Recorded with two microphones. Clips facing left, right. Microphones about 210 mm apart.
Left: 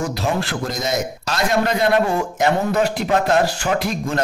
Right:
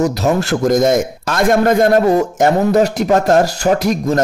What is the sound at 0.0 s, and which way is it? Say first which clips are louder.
A man's voice: right 7 dB; 45° right (ahead or behind).